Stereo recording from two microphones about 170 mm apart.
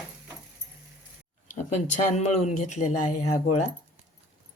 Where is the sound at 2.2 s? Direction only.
40° left (ahead or behind).